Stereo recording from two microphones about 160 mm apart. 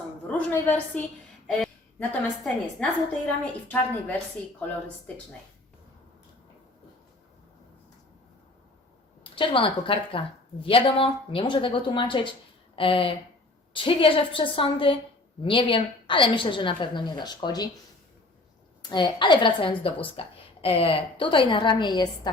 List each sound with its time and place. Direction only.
0.3 s a woman's voice: 10° left (ahead or behind)
9.3 s a woman's voice: 30° left (ahead or behind)
18.8 s a woman's voice: 25° left (ahead or behind)